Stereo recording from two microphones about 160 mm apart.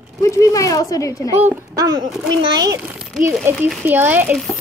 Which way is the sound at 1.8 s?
25° right (ahead or behind).